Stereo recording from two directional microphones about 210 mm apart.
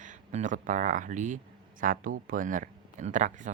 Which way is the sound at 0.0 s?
35° right (ahead or behind).